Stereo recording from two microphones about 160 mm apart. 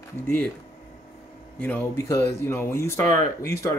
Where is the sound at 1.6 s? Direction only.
10° left (ahead or behind).